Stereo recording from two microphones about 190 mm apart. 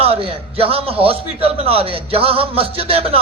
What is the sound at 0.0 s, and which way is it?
A man's voice, 30° right (ahead or behind).